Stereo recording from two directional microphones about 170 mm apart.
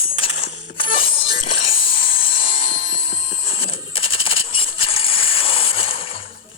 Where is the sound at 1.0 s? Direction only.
35° left (ahead or behind).